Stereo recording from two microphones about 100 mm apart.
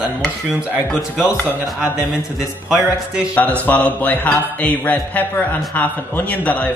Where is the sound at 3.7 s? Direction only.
15° left (ahead or behind).